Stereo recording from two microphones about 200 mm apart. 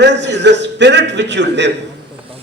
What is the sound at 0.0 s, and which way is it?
A man's voice, 60° right (ahead or behind).